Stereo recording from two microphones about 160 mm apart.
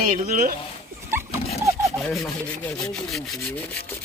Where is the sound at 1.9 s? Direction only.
5° left (ahead or behind).